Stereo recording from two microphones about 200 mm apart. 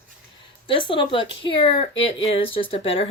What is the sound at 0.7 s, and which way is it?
Speech, 25° left (ahead or behind).